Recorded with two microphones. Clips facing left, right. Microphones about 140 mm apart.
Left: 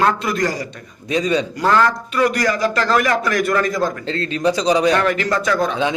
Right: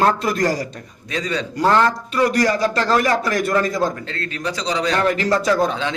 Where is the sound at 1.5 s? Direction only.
30° right (ahead or behind).